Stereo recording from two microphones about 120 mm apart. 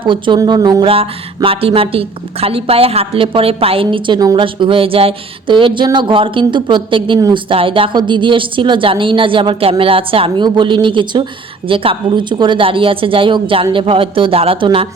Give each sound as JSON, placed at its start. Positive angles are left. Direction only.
{"t": 0.0, "sound": "a woman's voice", "side_deg": -45}
{"t": 0.9, "sound": "a woman's voice", "side_deg": -50}
{"t": 4.4, "sound": "a woman's voice", "side_deg": -45}